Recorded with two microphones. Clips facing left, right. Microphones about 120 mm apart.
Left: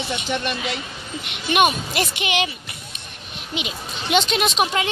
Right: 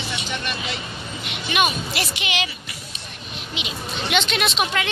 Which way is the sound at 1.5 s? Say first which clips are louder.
Left 4 dB; 50° left (ahead or behind).